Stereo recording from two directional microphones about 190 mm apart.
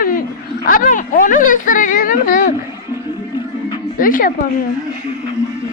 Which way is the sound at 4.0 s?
45° left (ahead or behind).